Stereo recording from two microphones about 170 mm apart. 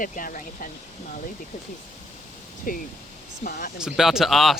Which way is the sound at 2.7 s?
55° left (ahead or behind).